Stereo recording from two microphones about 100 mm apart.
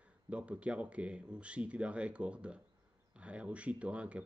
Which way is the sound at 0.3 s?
10° right (ahead or behind).